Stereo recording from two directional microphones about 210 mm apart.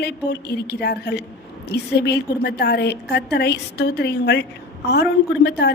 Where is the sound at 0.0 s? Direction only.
50° left (ahead or behind).